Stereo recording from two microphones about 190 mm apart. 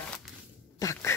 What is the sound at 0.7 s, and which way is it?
Dog, 15° left (ahead or behind).